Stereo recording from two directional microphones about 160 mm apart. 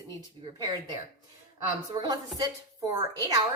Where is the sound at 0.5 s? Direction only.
25° right (ahead or behind).